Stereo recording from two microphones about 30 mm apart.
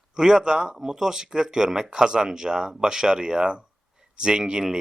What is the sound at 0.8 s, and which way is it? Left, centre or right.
Speech, centre.